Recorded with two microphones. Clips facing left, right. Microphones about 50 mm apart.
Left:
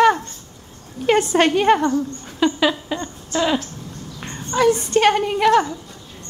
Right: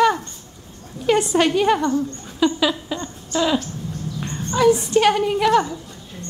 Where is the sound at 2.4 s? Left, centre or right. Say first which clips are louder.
Left 1 dB; centre.